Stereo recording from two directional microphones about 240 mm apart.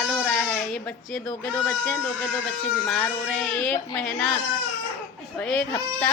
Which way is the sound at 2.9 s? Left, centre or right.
Centre.